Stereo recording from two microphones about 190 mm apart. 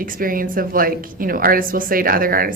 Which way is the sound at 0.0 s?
50° right (ahead or behind).